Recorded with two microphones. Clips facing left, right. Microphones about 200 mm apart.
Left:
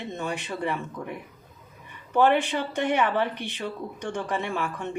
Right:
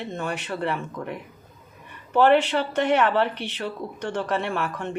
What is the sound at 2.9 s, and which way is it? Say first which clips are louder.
Speech: right 4 dB; 75° right (ahead or behind).